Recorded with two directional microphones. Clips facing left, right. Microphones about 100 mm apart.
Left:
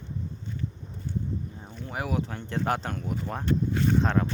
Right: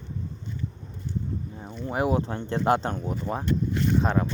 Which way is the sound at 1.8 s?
25° right (ahead or behind).